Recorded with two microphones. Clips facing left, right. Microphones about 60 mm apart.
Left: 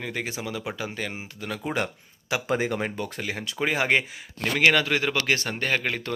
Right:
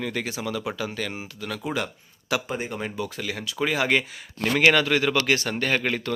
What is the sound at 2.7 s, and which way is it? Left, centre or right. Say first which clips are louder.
Speech: left 1 dB; left.